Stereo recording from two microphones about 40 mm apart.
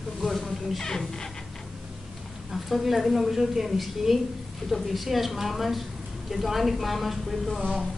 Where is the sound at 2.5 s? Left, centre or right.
Centre.